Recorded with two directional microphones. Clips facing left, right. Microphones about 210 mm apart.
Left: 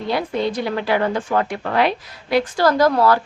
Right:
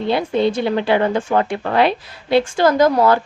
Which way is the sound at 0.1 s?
25° right (ahead or behind).